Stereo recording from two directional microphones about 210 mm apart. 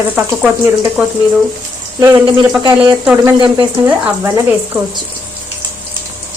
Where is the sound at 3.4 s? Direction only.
20° right (ahead or behind).